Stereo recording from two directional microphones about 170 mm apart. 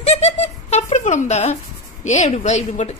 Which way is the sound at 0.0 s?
40° left (ahead or behind).